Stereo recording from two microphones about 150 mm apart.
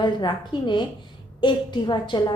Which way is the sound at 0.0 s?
30° left (ahead or behind).